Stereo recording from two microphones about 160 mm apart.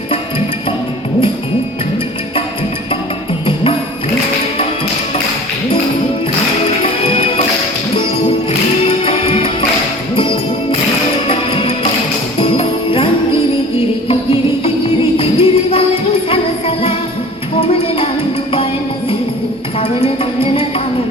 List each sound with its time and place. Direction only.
3.4 s music: 35° left (ahead or behind)
6.8 s music: 35° left (ahead or behind)
9.0 s music: 35° left (ahead or behind)
19.8 s music: 35° left (ahead or behind)